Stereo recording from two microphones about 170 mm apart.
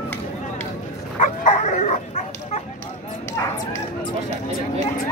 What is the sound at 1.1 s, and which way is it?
Dog, 45° left (ahead or behind).